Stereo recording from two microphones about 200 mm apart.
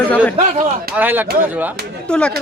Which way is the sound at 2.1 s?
5° left (ahead or behind).